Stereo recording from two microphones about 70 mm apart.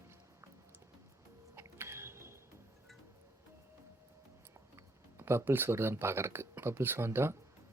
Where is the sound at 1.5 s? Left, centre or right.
Right.